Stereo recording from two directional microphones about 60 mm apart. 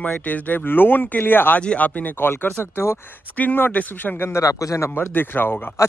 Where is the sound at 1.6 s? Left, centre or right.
Left.